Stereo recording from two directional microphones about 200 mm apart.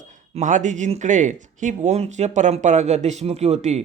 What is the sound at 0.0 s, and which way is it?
Speech, 40° right (ahead or behind).